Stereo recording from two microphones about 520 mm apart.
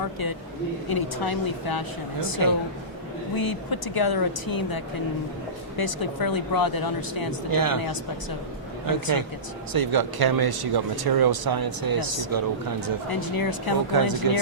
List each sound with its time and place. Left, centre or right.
0.9 s speech: left
3.3 s speech: left
7.5 s speech: right
8.9 s speech: right
13.1 s speech: left
13.9 s speech: right